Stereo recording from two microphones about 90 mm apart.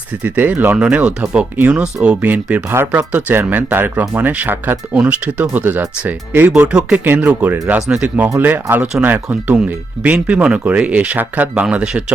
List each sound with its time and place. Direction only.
0.2 s speech: 20° right (ahead or behind)
1.5 s speech: 20° right (ahead or behind)
1.8 s speech: 10° right (ahead or behind)